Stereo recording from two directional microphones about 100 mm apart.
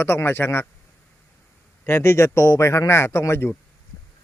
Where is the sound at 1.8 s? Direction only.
25° left (ahead or behind).